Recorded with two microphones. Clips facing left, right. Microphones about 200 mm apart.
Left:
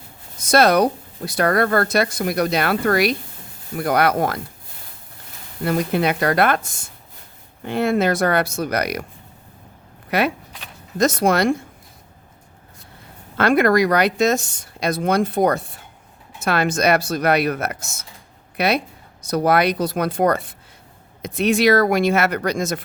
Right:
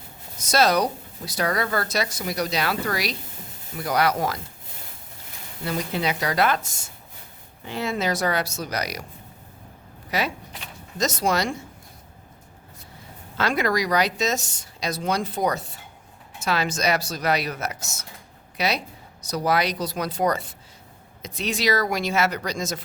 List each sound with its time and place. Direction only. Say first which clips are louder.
0.3 s speech: left 5 dB; 55° left (ahead or behind)
5.6 s speech: left 7 dB; 55° left (ahead or behind)
10.1 s speech: left 6 dB; 60° left (ahead or behind)
13.3 s speech: left 8 dB; 55° left (ahead or behind)